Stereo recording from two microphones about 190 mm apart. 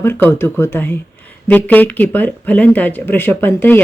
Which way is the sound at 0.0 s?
10° left (ahead or behind).